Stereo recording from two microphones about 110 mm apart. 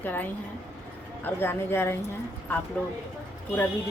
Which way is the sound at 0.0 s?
15° left (ahead or behind).